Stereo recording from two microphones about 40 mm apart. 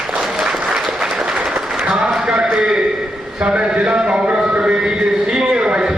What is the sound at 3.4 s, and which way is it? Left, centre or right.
A man's voice, right.